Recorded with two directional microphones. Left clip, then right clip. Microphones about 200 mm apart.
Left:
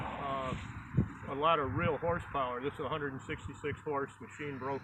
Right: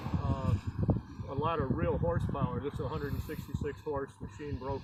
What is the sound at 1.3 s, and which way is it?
Speech, 15° left (ahead or behind).